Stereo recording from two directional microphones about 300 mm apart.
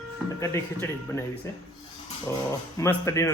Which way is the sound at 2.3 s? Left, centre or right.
Centre.